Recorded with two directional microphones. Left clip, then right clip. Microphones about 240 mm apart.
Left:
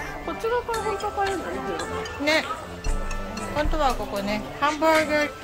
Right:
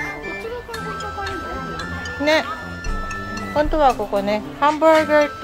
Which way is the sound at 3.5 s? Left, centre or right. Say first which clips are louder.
Right 8 dB; centre.